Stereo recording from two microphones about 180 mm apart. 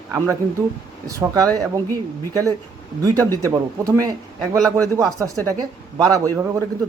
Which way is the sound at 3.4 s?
20° right (ahead or behind).